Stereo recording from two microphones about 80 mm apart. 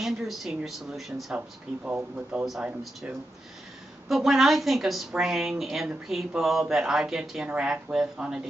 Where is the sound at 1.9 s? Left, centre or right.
Centre.